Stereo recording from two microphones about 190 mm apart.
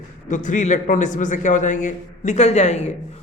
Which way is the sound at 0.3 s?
40° left (ahead or behind).